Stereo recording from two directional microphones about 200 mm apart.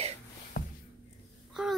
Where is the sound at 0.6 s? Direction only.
50° left (ahead or behind).